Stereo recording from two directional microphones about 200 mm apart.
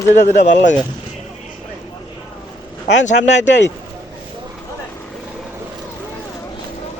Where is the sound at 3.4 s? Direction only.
65° left (ahead or behind).